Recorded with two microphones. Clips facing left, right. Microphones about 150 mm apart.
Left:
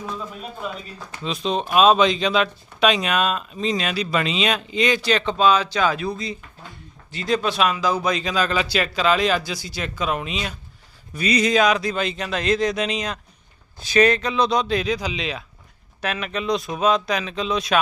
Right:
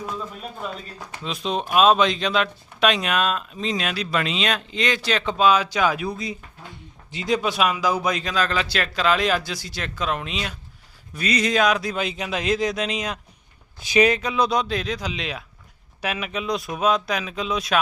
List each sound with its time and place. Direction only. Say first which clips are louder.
1.2 s speech: left 2 dB; 5° right (ahead or behind)